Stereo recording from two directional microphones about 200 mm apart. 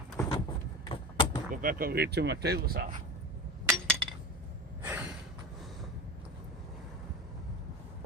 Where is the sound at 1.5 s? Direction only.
45° right (ahead or behind).